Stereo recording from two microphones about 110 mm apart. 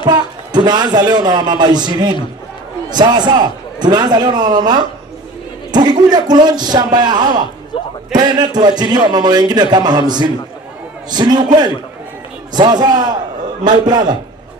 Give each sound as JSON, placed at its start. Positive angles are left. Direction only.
{"t": 0.0, "sound": "speech", "side_deg": -40}
{"t": 7.7, "sound": "a man's voice", "side_deg": 50}
{"t": 8.1, "sound": "speech", "side_deg": -40}